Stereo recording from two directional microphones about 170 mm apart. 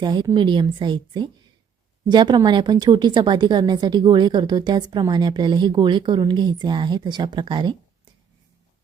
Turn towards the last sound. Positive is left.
turn(degrees=-30)  # may be behind; listen again after turning